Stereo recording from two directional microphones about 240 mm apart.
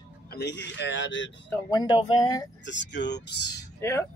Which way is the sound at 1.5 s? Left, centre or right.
Centre.